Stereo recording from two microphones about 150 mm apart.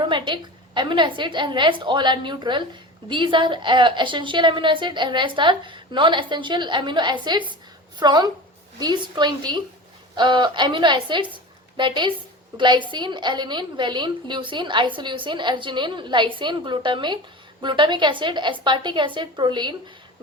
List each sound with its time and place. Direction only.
0.1 s a woman's voice: 30° right (ahead or behind)